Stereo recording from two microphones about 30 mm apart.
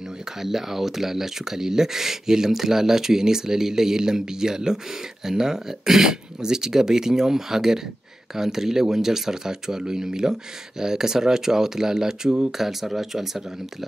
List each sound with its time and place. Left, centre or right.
0.4 s speech: centre
12.5 s speech: centre